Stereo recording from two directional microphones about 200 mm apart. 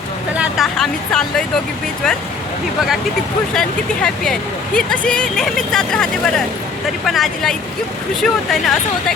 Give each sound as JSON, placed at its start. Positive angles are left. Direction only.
{"t": 0.3, "sound": "speech", "side_deg": 0}
{"t": 3.5, "sound": "speech", "side_deg": 0}